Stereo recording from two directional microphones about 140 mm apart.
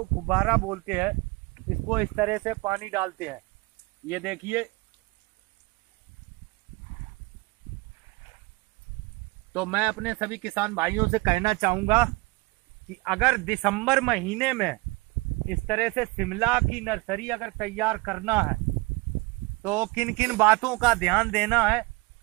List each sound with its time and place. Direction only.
0.3 s speech: 5° right (ahead or behind)
2.4 s speech: 30° right (ahead or behind); by 4.6 s 10° right (ahead or behind)
9.5 s speech: 10° right (ahead or behind)
13.0 s speech: 5° right (ahead or behind)
19.6 s speech: 10° right (ahead or behind); by 21.8 s 10° left (ahead or behind)